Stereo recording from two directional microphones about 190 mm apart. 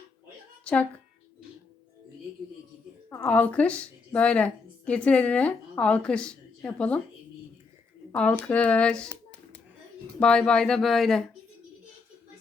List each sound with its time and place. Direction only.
0.6 s a woman's voice: 10° left (ahead or behind)
3.2 s a woman's voice: 5° left (ahead or behind)
8.1 s speech: 5° left (ahead or behind)